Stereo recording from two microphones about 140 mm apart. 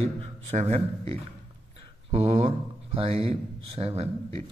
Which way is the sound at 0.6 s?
50° right (ahead or behind).